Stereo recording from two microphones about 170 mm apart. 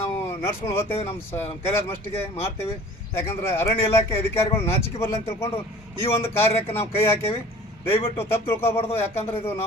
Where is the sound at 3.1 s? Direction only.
15° left (ahead or behind).